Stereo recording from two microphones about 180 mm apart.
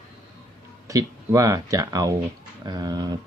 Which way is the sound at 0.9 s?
20° right (ahead or behind).